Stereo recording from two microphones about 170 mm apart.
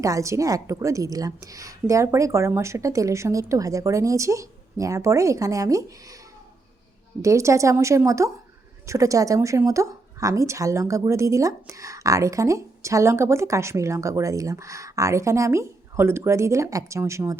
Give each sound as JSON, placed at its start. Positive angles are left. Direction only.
{"t": 0.0, "sound": "a woman's voice", "side_deg": -20}
{"t": 7.2, "sound": "a woman's voice", "side_deg": -20}